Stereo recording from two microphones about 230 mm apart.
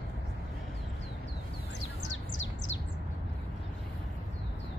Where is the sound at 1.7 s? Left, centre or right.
Left.